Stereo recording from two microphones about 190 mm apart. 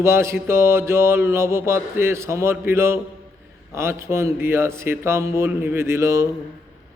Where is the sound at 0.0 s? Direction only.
15° right (ahead or behind).